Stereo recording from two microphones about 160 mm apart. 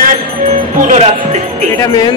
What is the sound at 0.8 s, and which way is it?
Music, 45° right (ahead or behind).